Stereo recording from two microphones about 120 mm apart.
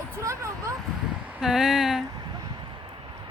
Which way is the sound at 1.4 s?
5° right (ahead or behind).